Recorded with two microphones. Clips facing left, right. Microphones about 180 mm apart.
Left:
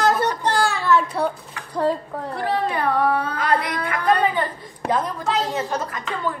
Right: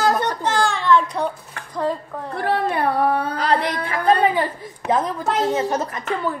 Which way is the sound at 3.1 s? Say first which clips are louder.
Right 1 dB; 30° right (ahead or behind).